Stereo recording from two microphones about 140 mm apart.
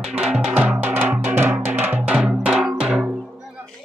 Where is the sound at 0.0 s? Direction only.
5° right (ahead or behind).